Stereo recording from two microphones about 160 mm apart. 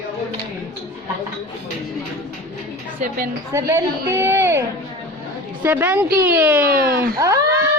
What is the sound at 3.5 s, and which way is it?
Speech, 15° right (ahead or behind).